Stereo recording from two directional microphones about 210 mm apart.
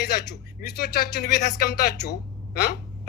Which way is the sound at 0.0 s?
50° left (ahead or behind).